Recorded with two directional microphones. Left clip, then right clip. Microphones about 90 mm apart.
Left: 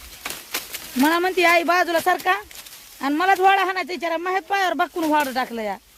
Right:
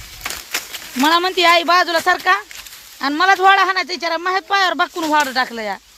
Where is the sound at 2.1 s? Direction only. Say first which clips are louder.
Right 5 dB; 15° left (ahead or behind).